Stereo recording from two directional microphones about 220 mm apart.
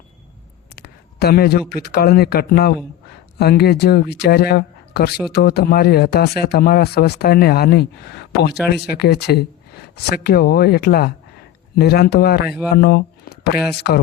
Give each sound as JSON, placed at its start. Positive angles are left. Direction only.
{"t": 0.8, "sound": "speech", "side_deg": 45}